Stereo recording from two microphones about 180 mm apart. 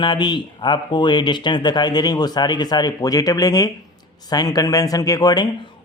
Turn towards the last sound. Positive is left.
turn(degrees=20)  # may be behind; listen again after turning